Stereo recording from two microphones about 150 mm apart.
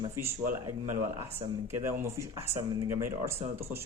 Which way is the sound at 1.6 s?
15° right (ahead or behind).